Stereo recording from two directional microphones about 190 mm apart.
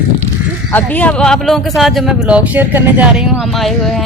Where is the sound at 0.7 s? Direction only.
10° left (ahead or behind).